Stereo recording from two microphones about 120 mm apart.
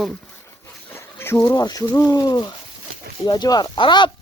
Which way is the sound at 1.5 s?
35° left (ahead or behind).